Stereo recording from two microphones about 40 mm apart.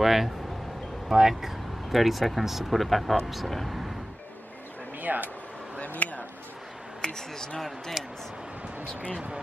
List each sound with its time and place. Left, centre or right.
0.0 s speech: centre
5.0 s speech: right
5.8 s a sound: left
7.0 s speech: centre
8.0 s speech: centre